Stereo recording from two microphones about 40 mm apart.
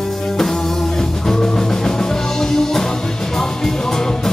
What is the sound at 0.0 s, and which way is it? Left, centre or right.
Music, centre.